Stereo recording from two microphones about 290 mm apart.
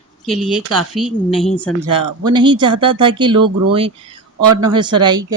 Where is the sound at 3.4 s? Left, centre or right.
Right.